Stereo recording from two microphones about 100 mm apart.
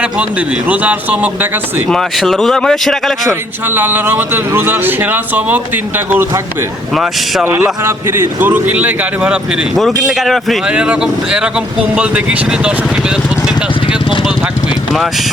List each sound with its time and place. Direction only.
0.0 s speech: 15° right (ahead or behind)
1.9 s speech: 5° left (ahead or behind)
3.7 s a man's voice: 20° right (ahead or behind)
6.9 s speech: centre (ahead or behind)
7.4 s a man's voice: 25° right (ahead or behind)
9.7 s speech: centre (ahead or behind)
10.7 s speech: 10° right (ahead or behind)